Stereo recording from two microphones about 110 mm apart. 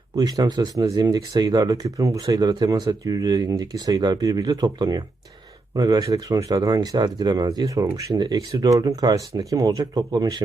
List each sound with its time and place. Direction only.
0.2 s speech: 40° right (ahead or behind)